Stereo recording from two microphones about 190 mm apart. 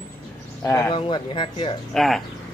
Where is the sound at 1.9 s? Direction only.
Centre (ahead or behind).